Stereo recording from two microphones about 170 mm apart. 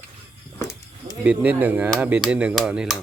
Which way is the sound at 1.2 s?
10° right (ahead or behind).